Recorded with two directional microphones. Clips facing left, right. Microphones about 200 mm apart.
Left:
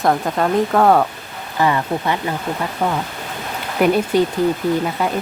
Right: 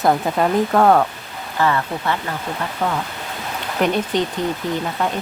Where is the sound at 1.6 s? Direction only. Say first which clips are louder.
Left 2 dB; 15° left (ahead or behind).